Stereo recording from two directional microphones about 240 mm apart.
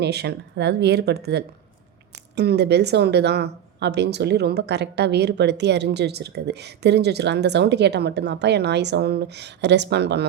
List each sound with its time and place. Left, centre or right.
0.0 s speech: right